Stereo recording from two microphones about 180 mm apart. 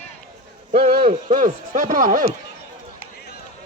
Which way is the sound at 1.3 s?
45° right (ahead or behind).